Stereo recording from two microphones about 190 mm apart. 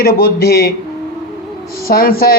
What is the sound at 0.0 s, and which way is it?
Speech, 50° left (ahead or behind).